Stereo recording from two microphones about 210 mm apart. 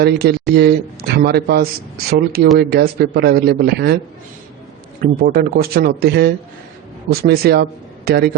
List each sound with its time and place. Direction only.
0.0 s speech: 50° right (ahead or behind)
5.2 s speech: 45° right (ahead or behind)